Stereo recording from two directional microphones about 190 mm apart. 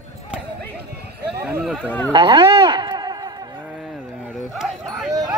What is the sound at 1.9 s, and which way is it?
Speech, 10° left (ahead or behind).